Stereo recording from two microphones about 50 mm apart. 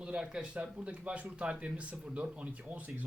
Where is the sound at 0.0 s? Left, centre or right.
Centre.